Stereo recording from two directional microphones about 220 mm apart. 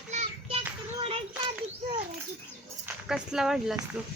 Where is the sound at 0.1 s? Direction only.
30° right (ahead or behind).